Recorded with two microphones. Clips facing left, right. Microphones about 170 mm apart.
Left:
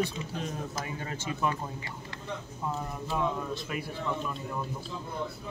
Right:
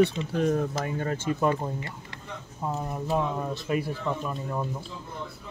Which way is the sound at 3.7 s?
35° right (ahead or behind).